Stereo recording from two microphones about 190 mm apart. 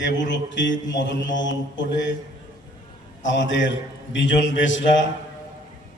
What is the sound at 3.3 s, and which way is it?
Speech, 75° left (ahead or behind).